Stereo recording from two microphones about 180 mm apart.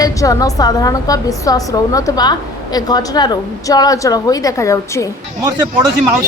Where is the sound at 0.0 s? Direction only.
20° left (ahead or behind).